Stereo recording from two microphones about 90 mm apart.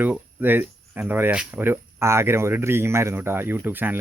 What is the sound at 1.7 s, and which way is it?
Speech, 30° right (ahead or behind).